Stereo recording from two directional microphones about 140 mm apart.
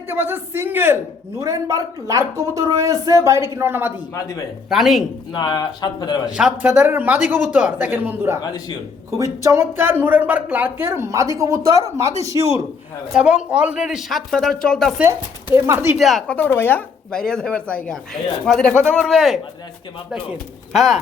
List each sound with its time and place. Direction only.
0.1 s a man's voice: 15° right (ahead or behind)
4.1 s speech: 25° left (ahead or behind)
4.7 s speech: centre (ahead or behind)
5.3 s speech: 35° left (ahead or behind)
6.3 s a man's voice: 10° right (ahead or behind)
8.4 s speech: 30° left (ahead or behind)
9.0 s speech: 20° right (ahead or behind)
13.1 s speech: 5° right (ahead or behind)
15.0 s speech: 20° right (ahead or behind)
16.0 s speech: centre (ahead or behind)
20.7 s speech: centre (ahead or behind)